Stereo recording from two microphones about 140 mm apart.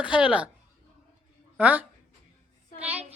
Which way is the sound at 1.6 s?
10° right (ahead or behind).